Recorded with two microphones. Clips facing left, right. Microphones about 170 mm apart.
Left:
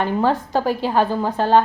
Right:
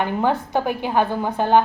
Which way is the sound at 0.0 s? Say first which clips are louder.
Left 2 dB; 15° right (ahead or behind).